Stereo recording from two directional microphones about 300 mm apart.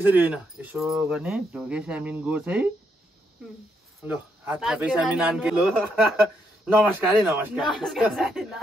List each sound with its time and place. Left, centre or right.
0.0 s speech: centre
4.0 s speech: centre